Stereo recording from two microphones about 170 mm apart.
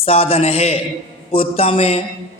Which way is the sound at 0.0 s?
35° left (ahead or behind).